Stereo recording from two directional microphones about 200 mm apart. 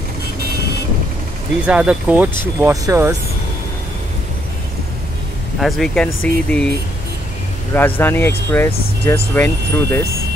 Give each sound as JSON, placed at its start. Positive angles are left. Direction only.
{"t": 1.7, "sound": "speech", "side_deg": -5}
{"t": 5.6, "sound": "speech", "side_deg": 0}
{"t": 7.7, "sound": "speech", "side_deg": 10}